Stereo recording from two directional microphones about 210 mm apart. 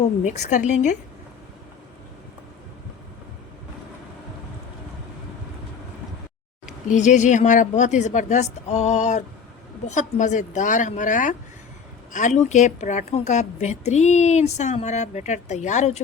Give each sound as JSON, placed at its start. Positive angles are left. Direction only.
{"t": 0.0, "sound": "a woman's voice", "side_deg": 35}
{"t": 6.8, "sound": "a woman's voice", "side_deg": 35}